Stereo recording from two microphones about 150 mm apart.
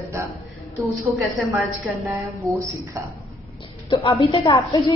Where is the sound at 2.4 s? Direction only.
20° right (ahead or behind).